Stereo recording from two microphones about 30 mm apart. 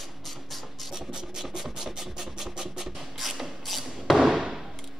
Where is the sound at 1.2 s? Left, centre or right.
Centre.